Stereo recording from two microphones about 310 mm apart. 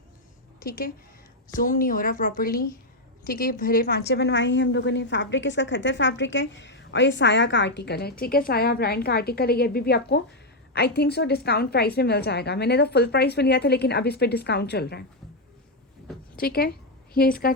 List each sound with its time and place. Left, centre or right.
0.6 s a woman's voice: left
16.4 s a woman's voice: left